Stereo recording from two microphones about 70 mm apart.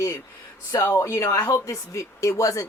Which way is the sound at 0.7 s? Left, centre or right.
Left.